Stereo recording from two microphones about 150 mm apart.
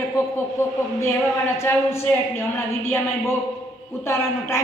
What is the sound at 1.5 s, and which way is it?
Speech, 15° left (ahead or behind).